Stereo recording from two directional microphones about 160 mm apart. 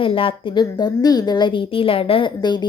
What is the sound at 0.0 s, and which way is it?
A woman's voice, 35° left (ahead or behind).